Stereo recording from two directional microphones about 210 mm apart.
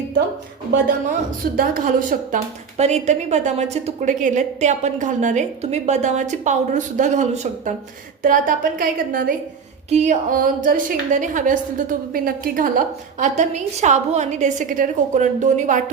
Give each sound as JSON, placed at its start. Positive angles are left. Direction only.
{"t": 1.5, "sound": "a woman's voice", "side_deg": -40}